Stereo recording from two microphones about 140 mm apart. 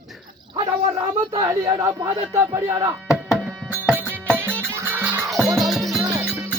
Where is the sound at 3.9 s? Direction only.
15° right (ahead or behind).